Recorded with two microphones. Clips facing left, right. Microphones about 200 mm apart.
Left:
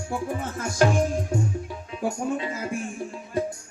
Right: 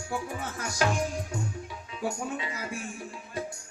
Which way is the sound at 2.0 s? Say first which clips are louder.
Left 6 dB; 45° left (ahead or behind).